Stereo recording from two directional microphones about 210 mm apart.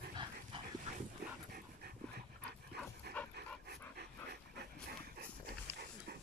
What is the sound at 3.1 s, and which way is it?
Dog, 5° left (ahead or behind).